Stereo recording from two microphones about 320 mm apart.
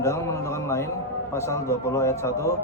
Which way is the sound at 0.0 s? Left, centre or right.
Centre.